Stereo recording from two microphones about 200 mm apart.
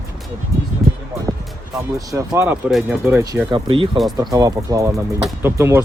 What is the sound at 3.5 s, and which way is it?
Speech, 25° right (ahead or behind).